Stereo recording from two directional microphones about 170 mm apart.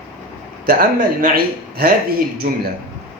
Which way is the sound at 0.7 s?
55° right (ahead or behind).